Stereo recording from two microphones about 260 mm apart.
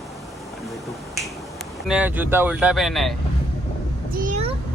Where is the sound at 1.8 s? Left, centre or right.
Centre.